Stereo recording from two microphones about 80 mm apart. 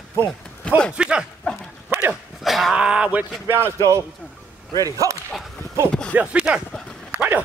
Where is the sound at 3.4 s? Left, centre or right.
Right.